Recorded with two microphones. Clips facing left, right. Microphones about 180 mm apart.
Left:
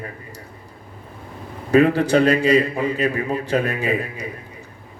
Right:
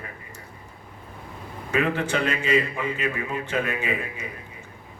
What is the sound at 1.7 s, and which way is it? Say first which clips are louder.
A man's voice: left 9 dB; 35° left (ahead or behind).